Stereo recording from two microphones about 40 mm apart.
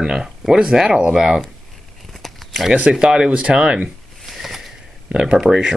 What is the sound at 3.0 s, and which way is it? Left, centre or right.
Speech, right.